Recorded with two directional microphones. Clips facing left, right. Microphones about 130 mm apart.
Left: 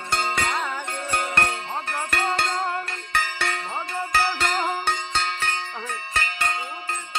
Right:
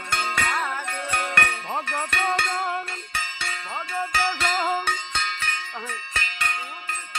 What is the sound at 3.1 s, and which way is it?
Music, 55° left (ahead or behind).